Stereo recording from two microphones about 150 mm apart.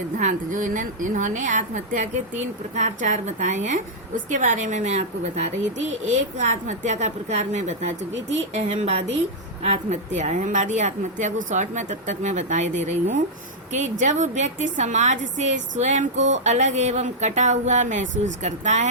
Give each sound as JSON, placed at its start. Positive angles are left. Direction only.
{"t": 0.2, "sound": "a woman's voice", "side_deg": -55}